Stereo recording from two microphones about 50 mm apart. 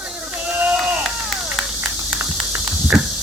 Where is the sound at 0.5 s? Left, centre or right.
Right.